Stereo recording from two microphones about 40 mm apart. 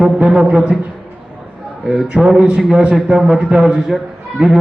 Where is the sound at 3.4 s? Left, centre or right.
Right.